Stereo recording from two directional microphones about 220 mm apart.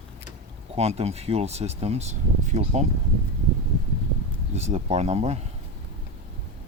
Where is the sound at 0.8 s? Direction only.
30° right (ahead or behind).